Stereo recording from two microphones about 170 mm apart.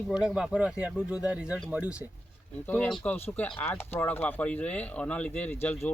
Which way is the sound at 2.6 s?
10° left (ahead or behind).